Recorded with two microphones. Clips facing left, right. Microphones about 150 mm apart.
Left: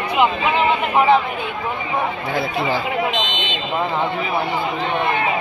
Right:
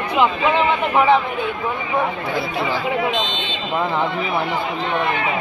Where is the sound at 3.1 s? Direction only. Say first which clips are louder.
Right 1 dB; 20° left (ahead or behind).